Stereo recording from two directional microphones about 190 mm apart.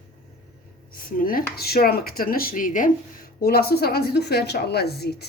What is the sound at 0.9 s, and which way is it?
Speech, 50° left (ahead or behind).